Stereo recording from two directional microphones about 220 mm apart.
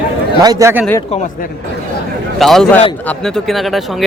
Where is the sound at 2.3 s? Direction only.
Centre (ahead or behind).